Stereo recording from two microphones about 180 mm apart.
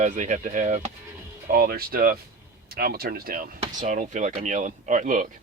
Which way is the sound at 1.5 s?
55° right (ahead or behind).